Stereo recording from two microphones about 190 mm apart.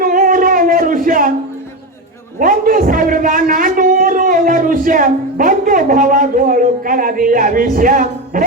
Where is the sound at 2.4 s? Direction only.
45° right (ahead or behind).